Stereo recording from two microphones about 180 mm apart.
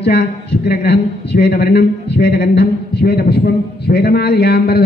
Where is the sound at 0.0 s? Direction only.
65° left (ahead or behind).